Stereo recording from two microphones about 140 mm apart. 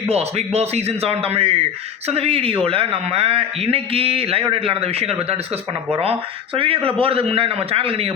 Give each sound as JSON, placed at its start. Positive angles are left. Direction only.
{"t": 0.1, "sound": "a man's voice", "side_deg": -50}
{"t": 6.6, "sound": "a man's voice", "side_deg": -40}